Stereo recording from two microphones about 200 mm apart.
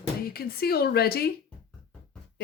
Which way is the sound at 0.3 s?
50° left (ahead or behind).